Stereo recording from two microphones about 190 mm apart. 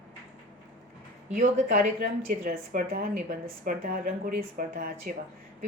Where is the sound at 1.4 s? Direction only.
40° right (ahead or behind).